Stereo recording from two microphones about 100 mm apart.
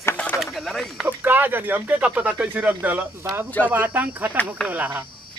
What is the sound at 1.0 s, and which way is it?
A man's voice, 20° right (ahead or behind).